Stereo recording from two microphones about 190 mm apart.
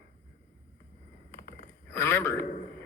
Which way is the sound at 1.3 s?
55° left (ahead or behind).